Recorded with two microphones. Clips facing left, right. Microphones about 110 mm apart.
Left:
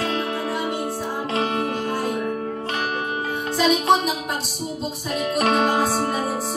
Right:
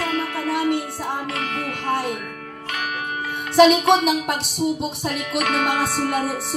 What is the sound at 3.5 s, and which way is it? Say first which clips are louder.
Speech: right 5 dB; 65° right (ahead or behind).